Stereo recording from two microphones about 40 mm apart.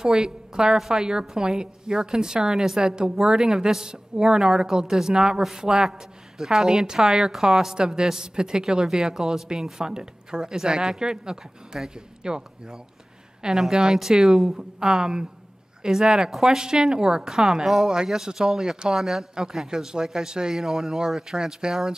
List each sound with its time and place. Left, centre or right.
0.0 s a woman's voice: centre